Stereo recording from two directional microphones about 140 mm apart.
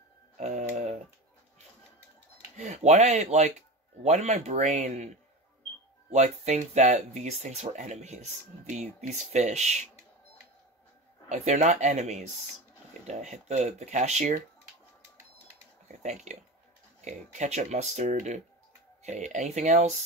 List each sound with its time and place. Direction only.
0.4 s a sound: 55° right (ahead or behind)
2.5 s speech: 55° right (ahead or behind)
11.2 s speech: 55° right (ahead or behind)
15.9 s speech: 55° right (ahead or behind)